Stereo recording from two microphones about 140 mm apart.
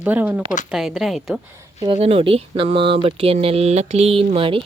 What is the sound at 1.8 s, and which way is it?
Speech, 40° right (ahead or behind).